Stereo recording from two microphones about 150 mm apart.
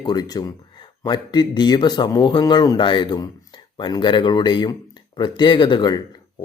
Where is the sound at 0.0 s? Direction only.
25° left (ahead or behind).